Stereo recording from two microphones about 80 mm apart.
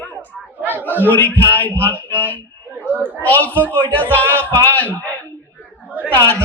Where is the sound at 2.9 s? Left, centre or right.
Right.